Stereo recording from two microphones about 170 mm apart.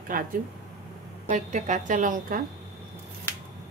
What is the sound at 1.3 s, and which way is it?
A woman's voice, 45° right (ahead or behind).